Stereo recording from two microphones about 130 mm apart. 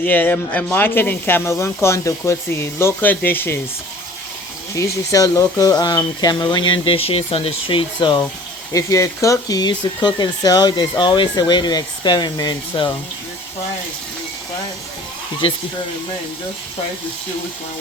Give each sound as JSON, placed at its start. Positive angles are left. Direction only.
{"t": 0.0, "sound": "speech", "side_deg": 15}
{"t": 4.7, "sound": "speech", "side_deg": 25}
{"t": 8.7, "sound": "speech", "side_deg": 25}